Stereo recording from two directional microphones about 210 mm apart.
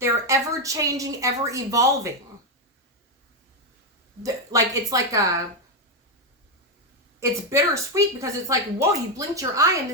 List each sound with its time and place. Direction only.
0.0 s speech: 15° right (ahead or behind)
4.2 s speech: 15° right (ahead or behind)
7.2 s speech: 15° right (ahead or behind)